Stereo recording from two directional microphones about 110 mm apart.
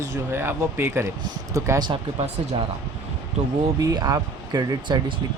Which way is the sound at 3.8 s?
35° right (ahead or behind).